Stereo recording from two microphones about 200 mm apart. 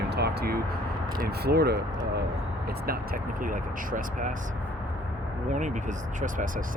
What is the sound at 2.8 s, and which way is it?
Speech, 45° right (ahead or behind).